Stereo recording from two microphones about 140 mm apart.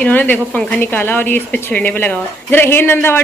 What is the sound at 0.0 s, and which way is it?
A woman's voice, 10° left (ahead or behind).